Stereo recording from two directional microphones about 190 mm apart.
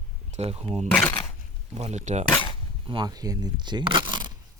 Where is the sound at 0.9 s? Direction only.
10° left (ahead or behind).